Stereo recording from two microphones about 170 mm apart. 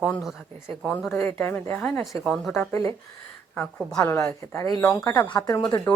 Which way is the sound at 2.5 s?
15° left (ahead or behind).